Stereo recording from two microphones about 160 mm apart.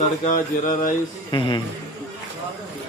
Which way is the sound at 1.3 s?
30° left (ahead or behind).